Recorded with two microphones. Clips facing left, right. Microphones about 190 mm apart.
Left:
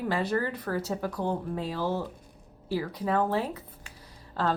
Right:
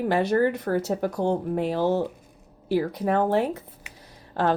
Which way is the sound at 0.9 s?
45° right (ahead or behind).